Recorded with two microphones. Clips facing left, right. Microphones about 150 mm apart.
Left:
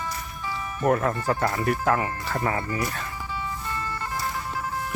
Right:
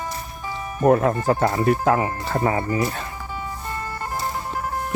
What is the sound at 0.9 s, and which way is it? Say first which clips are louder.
Speech: right 6 dB; 25° right (ahead or behind).